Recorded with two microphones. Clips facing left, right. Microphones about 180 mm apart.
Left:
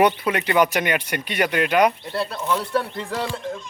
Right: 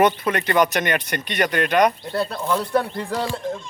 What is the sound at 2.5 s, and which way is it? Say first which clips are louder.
Speech: right 2 dB; 35° right (ahead or behind).